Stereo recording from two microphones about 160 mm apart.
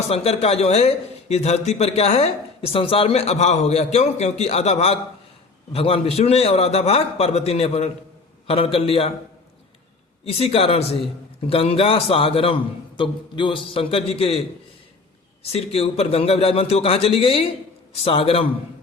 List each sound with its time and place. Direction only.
0.1 s a man's voice: 40° left (ahead or behind)
10.2 s a man's voice: 35° left (ahead or behind)
15.5 s a man's voice: 40° left (ahead or behind)